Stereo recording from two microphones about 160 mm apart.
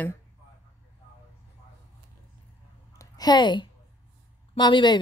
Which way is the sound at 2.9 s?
25° left (ahead or behind).